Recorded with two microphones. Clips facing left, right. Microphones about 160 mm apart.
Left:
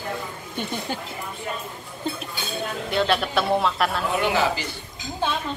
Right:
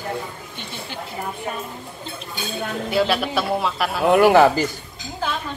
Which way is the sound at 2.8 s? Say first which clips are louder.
Right 2 dB; 5° right (ahead or behind).